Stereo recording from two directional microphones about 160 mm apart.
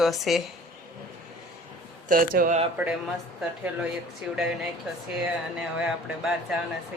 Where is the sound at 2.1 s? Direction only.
60° right (ahead or behind).